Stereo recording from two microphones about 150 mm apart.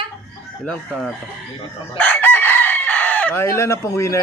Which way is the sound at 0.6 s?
Centre (ahead or behind).